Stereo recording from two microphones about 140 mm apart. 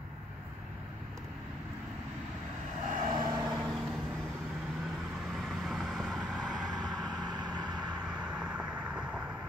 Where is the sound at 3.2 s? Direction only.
30° right (ahead or behind).